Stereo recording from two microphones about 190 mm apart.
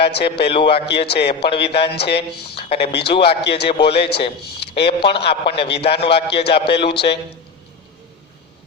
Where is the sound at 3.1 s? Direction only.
30° left (ahead or behind).